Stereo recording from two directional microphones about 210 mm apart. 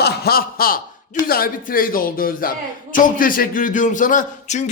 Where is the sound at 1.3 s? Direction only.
45° left (ahead or behind).